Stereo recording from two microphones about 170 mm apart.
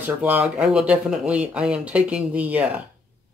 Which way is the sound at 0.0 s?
10° right (ahead or behind).